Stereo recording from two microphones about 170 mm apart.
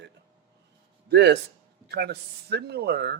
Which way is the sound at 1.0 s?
80° right.